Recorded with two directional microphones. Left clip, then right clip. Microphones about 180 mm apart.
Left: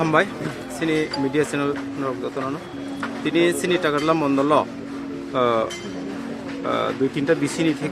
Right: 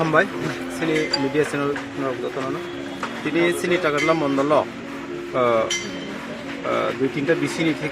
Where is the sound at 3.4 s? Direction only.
35° left (ahead or behind).